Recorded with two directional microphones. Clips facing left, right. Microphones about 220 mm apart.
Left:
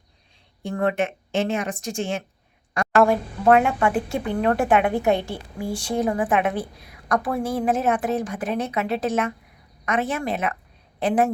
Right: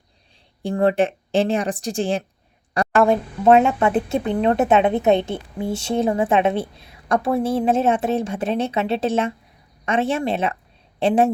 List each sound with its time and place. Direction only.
0.6 s speech: 30° right (ahead or behind)
2.8 s a sound: 35° right (ahead or behind)
3.1 s a woman's voice: 25° right (ahead or behind)